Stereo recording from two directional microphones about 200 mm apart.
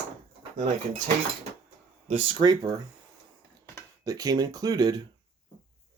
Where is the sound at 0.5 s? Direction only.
40° right (ahead or behind).